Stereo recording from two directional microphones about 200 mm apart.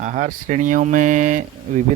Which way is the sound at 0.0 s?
40° right (ahead or behind).